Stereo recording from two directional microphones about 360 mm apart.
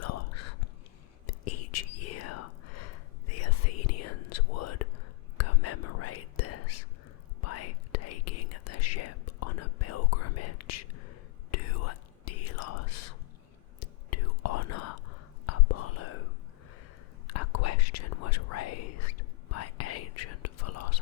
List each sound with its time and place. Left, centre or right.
0.0 s whispering: left
17.2 s whispering: left